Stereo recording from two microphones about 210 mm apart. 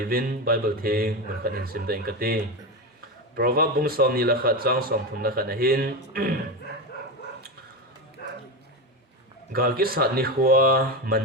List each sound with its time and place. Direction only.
0.1 s a man's voice: 45° right (ahead or behind)
9.5 s a man's voice: 45° right (ahead or behind)